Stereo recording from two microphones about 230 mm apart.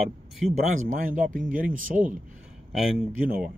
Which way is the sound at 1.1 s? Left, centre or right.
Right.